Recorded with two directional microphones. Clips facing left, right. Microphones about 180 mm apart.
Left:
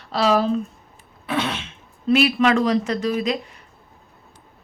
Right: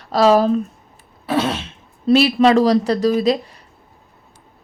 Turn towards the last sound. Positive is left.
turn(degrees=-35)  # may be behind; listen again after turning